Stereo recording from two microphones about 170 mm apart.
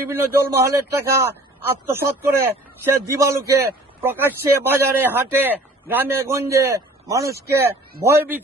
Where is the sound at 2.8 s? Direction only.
15° right (ahead or behind).